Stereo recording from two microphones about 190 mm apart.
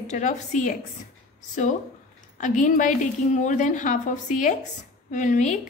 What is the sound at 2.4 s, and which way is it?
A woman's voice, 40° left (ahead or behind).